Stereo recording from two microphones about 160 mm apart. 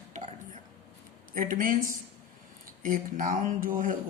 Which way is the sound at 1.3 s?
60° right (ahead or behind).